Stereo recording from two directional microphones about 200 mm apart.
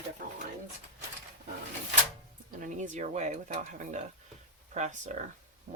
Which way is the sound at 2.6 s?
40° right (ahead or behind).